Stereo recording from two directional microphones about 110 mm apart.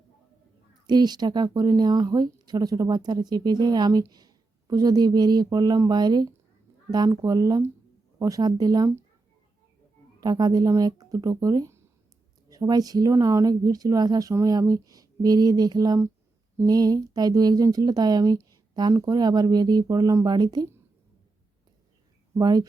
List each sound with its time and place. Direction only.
0.9 s speech: 40° right (ahead or behind)
10.2 s speech: 40° right (ahead or behind)
22.4 s speech: 40° right (ahead or behind)